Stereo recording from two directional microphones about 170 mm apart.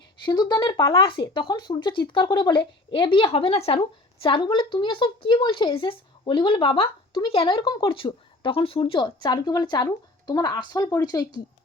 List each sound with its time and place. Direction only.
0.3 s speech: 25° left (ahead or behind)